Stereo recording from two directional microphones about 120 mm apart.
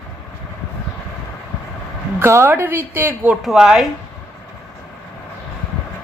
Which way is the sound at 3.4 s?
5° right (ahead or behind).